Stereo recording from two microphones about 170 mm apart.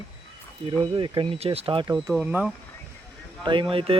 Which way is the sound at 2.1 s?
10° right (ahead or behind).